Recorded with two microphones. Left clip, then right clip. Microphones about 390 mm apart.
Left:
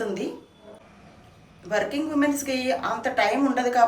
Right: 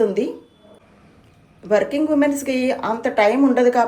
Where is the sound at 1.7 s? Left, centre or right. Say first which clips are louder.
Right 8 dB; centre.